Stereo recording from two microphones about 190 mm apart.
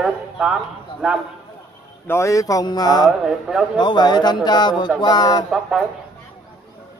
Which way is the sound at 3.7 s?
25° left (ahead or behind).